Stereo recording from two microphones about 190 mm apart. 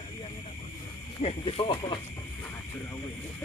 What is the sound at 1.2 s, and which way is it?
Speech, 30° left (ahead or behind).